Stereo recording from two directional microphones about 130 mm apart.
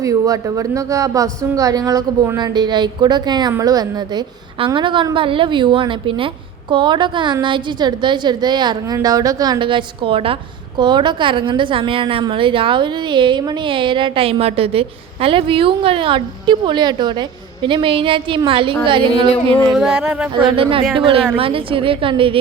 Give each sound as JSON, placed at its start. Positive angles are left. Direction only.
{"t": 0.0, "sound": "a woman's voice", "side_deg": -25}
{"t": 19.7, "sound": "speech", "side_deg": -5}
{"t": 20.3, "sound": "a woman's voice", "side_deg": -40}